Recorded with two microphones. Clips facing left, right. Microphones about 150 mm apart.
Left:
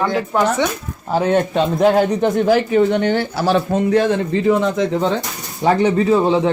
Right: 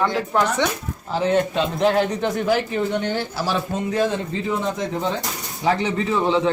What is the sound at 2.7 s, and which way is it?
Speech, 70° left (ahead or behind).